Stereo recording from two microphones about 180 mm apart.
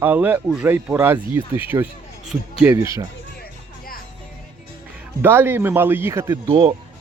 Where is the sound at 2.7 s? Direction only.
20° right (ahead or behind).